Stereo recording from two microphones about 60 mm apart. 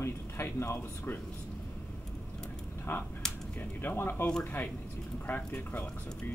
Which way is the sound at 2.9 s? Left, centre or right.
Left.